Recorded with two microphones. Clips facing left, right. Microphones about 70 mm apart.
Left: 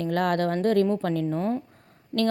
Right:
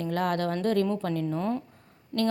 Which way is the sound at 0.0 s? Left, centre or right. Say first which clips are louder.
Left 3 dB; left.